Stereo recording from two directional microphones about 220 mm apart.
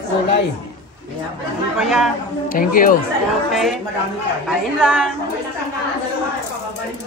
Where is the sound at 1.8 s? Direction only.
Centre (ahead or behind).